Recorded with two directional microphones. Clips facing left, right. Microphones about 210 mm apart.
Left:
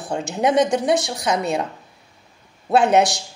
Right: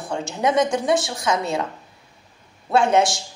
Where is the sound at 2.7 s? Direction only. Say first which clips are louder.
Left 2 dB; 20° left (ahead or behind).